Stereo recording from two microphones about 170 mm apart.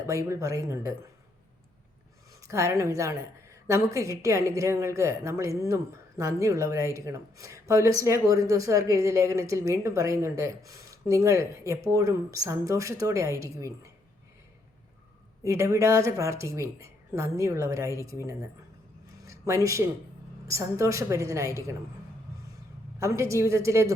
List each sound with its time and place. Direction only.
0.3 s speech: 20° right (ahead or behind)
2.4 s speech: 15° right (ahead or behind)
15.4 s speech: 15° right (ahead or behind)
19.2 s a sound: 20° right (ahead or behind)
20.5 s speech: 15° right (ahead or behind)
23.0 s speech: 15° right (ahead or behind)